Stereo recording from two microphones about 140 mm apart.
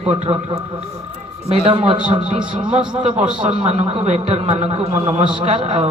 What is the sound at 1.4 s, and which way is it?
A woman's voice, 45° right (ahead or behind).